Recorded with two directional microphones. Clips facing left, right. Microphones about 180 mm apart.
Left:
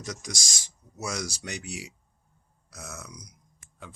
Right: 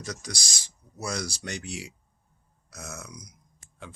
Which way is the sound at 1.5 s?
10° left (ahead or behind).